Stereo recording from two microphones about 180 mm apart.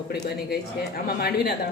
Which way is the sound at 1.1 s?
60° left (ahead or behind).